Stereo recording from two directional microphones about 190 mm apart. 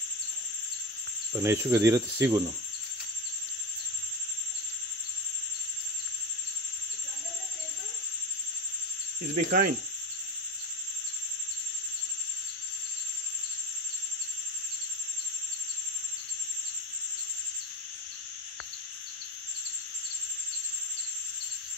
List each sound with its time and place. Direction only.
1.3 s cricket: 15° right (ahead or behind)
9.3 s cricket: 40° right (ahead or behind)